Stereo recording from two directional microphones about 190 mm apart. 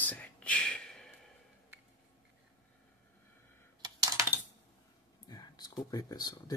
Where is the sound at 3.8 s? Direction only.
15° right (ahead or behind).